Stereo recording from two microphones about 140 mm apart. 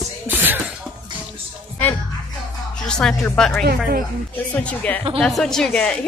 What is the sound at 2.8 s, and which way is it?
A woman's voice, 5° left (ahead or behind).